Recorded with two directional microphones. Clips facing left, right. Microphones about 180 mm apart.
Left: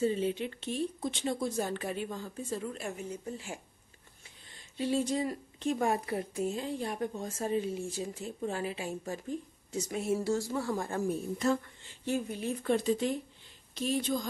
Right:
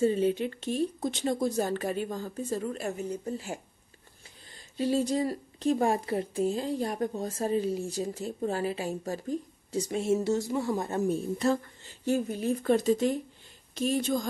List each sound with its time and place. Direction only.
0.0 s speech: 45° right (ahead or behind)
4.7 s speech: 40° right (ahead or behind); by 11.1 s 20° right (ahead or behind)
11.3 s speech: 35° right (ahead or behind)